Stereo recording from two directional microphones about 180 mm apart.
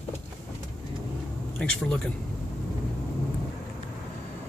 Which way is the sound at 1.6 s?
5° left (ahead or behind).